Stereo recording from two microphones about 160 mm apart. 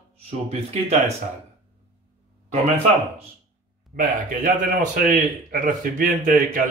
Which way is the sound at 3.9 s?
60° right (ahead or behind).